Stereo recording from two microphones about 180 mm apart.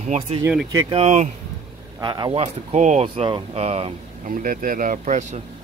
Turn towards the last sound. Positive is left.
turn(degrees=-40)  # may be behind; listen again after turning